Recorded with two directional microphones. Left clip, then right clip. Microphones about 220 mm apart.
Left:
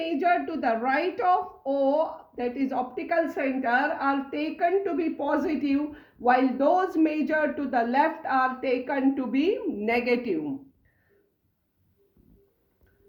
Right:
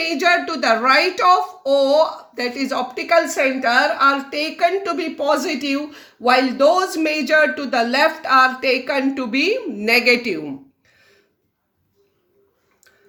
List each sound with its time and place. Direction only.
0.0 s speech: 50° right (ahead or behind)